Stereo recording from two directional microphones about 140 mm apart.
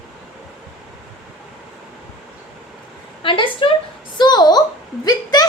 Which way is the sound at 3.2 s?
40° left (ahead or behind).